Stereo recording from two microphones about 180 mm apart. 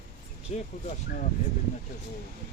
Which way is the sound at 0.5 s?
40° left (ahead or behind).